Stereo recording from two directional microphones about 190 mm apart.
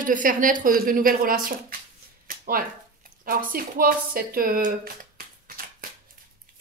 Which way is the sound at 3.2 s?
50° right (ahead or behind).